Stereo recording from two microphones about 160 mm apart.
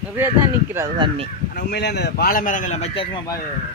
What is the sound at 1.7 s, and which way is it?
A man's voice, 90° left.